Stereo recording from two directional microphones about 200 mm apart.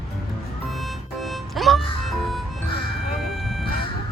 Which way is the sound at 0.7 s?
Centre (ahead or behind).